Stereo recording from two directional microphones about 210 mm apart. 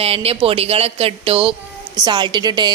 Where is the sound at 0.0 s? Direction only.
30° right (ahead or behind).